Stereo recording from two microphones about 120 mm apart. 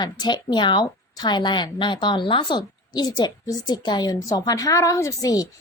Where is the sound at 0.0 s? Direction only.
40° left (ahead or behind).